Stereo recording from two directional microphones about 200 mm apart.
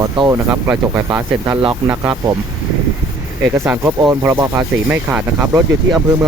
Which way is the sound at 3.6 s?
10° right (ahead or behind).